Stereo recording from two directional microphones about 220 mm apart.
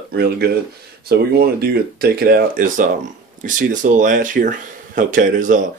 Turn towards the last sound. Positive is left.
turn(degrees=-35)  # may be behind; listen again after turning